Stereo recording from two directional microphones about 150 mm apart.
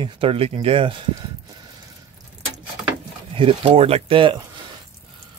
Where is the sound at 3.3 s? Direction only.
35° right (ahead or behind).